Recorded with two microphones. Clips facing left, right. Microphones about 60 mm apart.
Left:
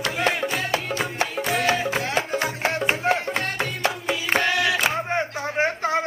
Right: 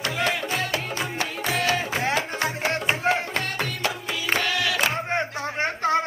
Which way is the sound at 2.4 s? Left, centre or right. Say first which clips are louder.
Left 1 dB; centre.